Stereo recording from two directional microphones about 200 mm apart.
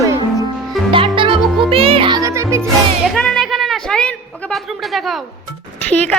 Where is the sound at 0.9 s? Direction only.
25° right (ahead or behind).